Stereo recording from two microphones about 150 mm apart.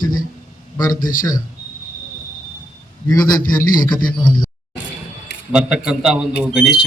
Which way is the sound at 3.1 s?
25° left (ahead or behind).